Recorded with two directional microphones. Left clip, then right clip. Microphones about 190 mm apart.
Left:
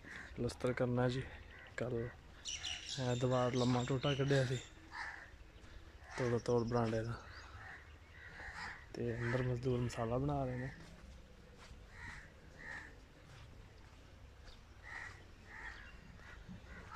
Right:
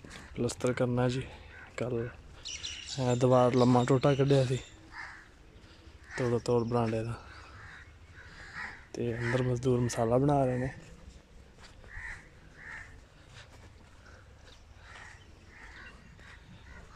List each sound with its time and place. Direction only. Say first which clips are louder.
0.1 s speech: right 8 dB; 15° right (ahead or behind)
2.4 s bird: right 4 dB; 40° left (ahead or behind)
3.0 s speech: right 12 dB; 25° right (ahead or behind)
4.9 s a sound: right 2 dB; 20° left (ahead or behind)
6.1 s speech: right 7 dB; 10° right (ahead or behind)
8.9 s speech: right 8 dB; 15° right (ahead or behind); by 10.7 s 35° right (ahead or behind)